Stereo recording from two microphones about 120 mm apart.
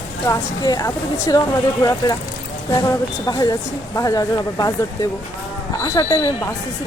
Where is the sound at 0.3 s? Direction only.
30° left (ahead or behind).